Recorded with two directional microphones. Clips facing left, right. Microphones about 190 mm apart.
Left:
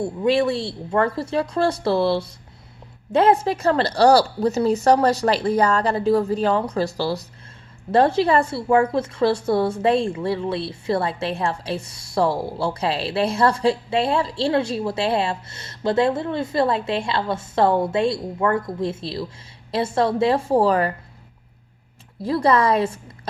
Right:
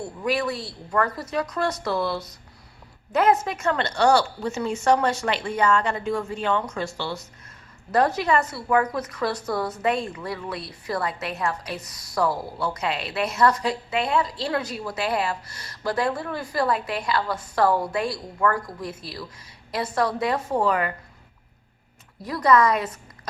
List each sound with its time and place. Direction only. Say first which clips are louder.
0.0 s a woman's voice: left 7 dB; 25° left (ahead or behind)
22.2 s a woman's voice: left 1 dB; 30° left (ahead or behind)